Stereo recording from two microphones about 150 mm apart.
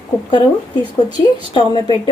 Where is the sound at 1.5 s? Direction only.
30° left (ahead or behind).